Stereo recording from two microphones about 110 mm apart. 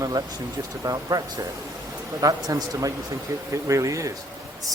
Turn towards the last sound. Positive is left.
turn(degrees=-30)  # may be behind; listen again after turning